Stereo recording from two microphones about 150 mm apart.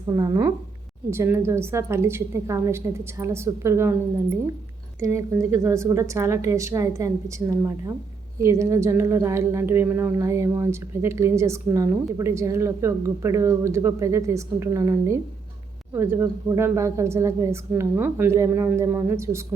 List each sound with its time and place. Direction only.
0.1 s speech: 25° right (ahead or behind)
4.9 s a woman's voice: 20° right (ahead or behind)